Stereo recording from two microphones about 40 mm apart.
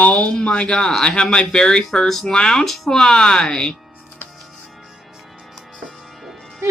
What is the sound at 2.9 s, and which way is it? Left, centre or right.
Speech, centre.